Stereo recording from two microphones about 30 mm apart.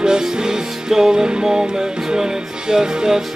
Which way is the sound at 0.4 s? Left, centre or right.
Right.